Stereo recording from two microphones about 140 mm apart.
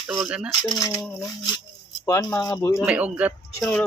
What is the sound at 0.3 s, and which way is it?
Speech, 5° right (ahead or behind).